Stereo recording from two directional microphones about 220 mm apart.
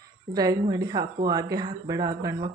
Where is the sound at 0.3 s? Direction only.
15° right (ahead or behind).